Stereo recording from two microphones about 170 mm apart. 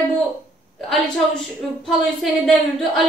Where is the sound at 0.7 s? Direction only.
Centre (ahead or behind).